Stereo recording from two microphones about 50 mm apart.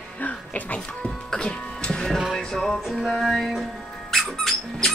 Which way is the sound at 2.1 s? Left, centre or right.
Centre.